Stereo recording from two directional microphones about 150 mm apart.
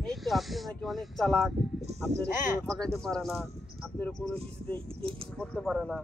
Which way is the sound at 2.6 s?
5° left (ahead or behind).